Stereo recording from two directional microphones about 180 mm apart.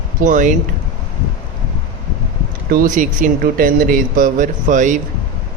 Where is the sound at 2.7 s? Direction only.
50° right (ahead or behind).